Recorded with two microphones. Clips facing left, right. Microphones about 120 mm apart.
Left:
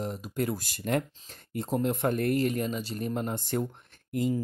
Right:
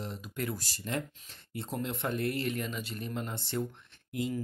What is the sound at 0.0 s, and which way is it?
Speech, 45° left (ahead or behind).